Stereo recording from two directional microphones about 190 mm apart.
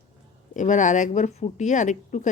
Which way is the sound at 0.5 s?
40° left (ahead or behind).